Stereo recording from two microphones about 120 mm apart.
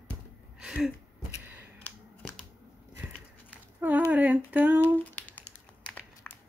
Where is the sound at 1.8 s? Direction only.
5° left (ahead or behind).